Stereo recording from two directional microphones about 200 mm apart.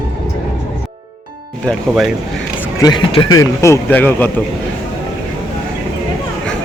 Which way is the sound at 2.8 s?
20° left (ahead or behind).